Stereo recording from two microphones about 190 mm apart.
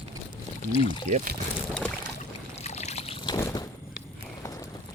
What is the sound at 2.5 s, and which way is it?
Boat, 35° left (ahead or behind).